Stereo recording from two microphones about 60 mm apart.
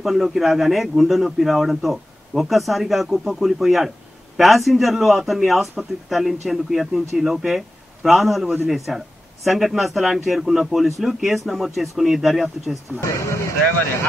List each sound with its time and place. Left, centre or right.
0.0 s a man's voice: centre
13.0 s speech: left